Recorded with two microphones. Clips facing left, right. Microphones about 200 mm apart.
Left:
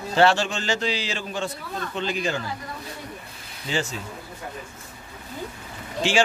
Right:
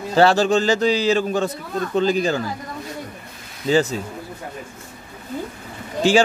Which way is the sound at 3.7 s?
40° right (ahead or behind).